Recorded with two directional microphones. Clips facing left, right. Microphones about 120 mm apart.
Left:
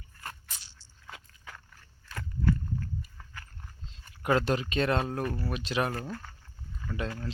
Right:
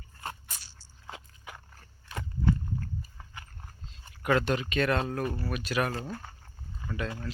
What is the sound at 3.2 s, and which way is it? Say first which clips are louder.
Walk: right 1 dB; 20° right (ahead or behind).